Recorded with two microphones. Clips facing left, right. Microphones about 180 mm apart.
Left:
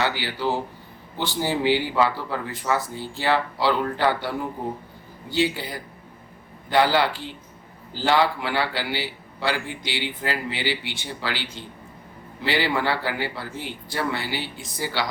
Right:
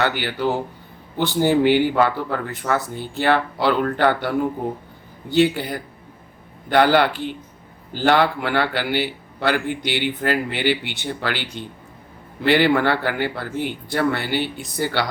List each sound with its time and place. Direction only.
0.2 s a man's voice: 55° right (ahead or behind)